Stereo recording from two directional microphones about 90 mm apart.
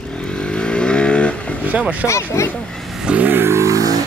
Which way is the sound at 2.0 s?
35° left (ahead or behind).